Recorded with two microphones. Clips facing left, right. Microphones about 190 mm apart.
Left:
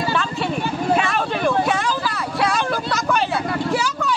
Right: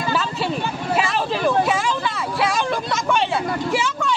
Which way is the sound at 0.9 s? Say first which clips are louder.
Left 1 dB; centre (ahead or behind).